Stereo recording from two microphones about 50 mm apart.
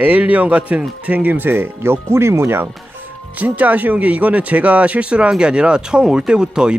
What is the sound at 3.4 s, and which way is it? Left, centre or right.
Speech, right.